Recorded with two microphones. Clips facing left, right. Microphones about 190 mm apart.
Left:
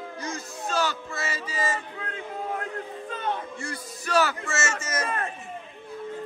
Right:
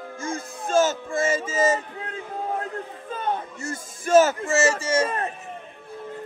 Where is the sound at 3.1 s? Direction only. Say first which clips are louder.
Right 3 dB; 45° right (ahead or behind); by 5.2 s 30° right (ahead or behind).